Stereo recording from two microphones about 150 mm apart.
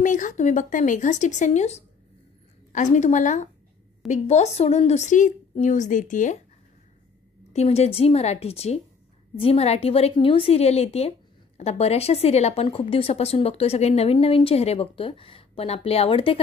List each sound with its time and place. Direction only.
0.0 s a woman's voice: 60° left (ahead or behind)
7.5 s a woman's voice: 45° left (ahead or behind)